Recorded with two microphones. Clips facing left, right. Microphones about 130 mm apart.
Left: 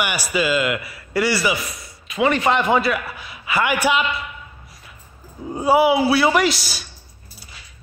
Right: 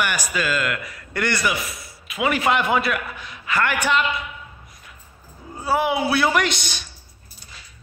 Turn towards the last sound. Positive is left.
turn(degrees=5)  # may be behind; listen again after turning